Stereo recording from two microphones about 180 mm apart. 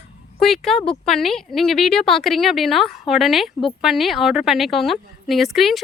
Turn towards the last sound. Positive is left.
turn(degrees=0)  # may be behind; listen again after turning